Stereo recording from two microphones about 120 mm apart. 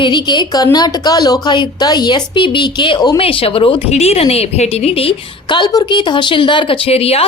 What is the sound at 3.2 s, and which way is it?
A woman's voice, 50° left (ahead or behind).